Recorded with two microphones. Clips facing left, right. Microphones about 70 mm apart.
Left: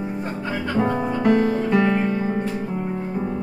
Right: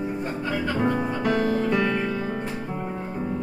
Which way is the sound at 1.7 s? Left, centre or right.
Centre.